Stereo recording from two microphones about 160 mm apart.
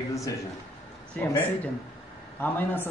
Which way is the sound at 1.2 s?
10° left (ahead or behind).